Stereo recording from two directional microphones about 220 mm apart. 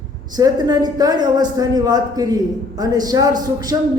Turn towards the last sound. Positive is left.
turn(degrees=-15)  # may be behind; listen again after turning